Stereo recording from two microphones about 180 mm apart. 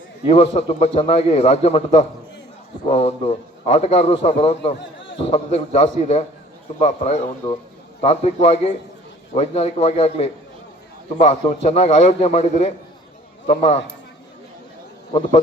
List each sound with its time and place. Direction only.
0.3 s a man's voice: 35° left (ahead or behind)